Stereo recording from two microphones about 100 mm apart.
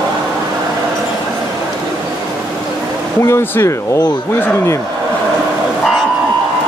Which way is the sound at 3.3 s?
25° left (ahead or behind).